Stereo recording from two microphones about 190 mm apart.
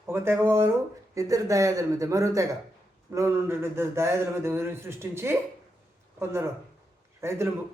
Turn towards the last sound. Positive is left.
turn(degrees=-15)  # may be behind; listen again after turning